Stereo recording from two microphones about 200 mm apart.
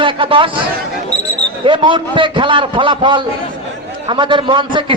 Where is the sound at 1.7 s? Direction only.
25° right (ahead or behind).